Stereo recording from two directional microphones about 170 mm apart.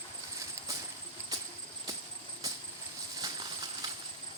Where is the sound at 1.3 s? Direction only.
20° right (ahead or behind).